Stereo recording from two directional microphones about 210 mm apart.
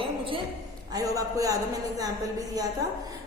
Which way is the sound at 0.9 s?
15° right (ahead or behind).